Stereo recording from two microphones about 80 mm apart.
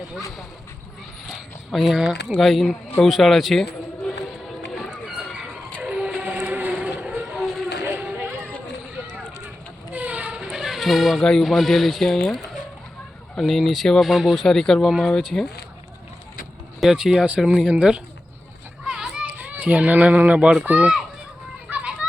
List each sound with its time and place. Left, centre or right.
1.3 s speech: centre
4.9 s a sound: centre
5.8 s vehicle: centre
7.3 s run: centre
7.9 s a sound: right
9.9 s speech: centre
16.8 s speech: centre
17.4 s speech: centre
17.7 s a child's voice: centre
21.7 s children playing: centre